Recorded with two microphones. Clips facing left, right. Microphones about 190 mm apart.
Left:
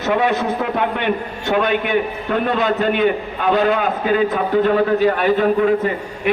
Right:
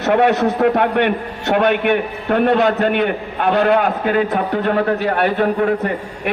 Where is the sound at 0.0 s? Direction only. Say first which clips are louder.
Right 4 dB; 65° right (ahead or behind).